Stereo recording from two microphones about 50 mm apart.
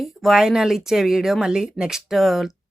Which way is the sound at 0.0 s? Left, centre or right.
Centre.